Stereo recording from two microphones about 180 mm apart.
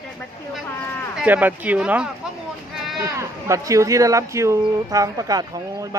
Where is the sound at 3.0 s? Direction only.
15° right (ahead or behind).